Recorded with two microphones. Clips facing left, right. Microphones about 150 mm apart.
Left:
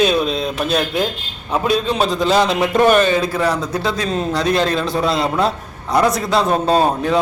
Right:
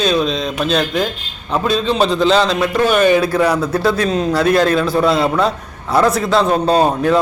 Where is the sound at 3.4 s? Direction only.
10° right (ahead or behind).